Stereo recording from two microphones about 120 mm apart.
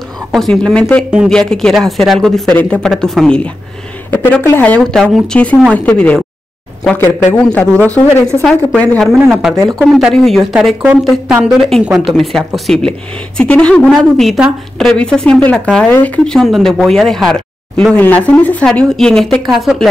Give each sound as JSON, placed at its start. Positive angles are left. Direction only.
{"t": 0.3, "sound": "a woman's voice", "side_deg": 5}
{"t": 4.1, "sound": "speech", "side_deg": 15}
{"t": 8.4, "sound": "a woman's voice", "side_deg": 5}
{"t": 11.8, "sound": "a woman's voice", "side_deg": -5}
{"t": 16.3, "sound": "a woman's voice", "side_deg": 0}